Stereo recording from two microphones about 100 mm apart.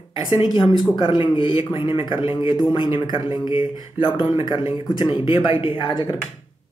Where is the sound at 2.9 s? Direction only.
40° right (ahead or behind).